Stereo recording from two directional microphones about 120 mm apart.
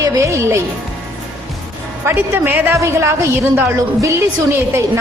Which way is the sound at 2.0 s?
15° right (ahead or behind).